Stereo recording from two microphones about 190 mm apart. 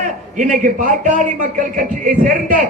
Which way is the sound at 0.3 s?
40° right (ahead or behind).